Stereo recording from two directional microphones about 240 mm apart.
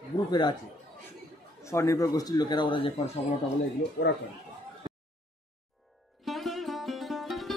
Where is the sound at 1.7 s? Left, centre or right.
Centre.